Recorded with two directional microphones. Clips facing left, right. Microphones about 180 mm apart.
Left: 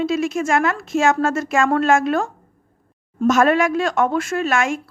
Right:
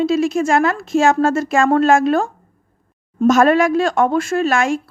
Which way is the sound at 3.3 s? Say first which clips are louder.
Right 3 dB; 35° right (ahead or behind).